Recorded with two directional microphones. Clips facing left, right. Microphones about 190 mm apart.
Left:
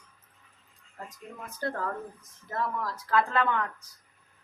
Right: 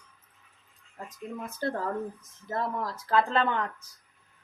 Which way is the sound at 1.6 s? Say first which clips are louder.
Right 2 dB; 30° right (ahead or behind).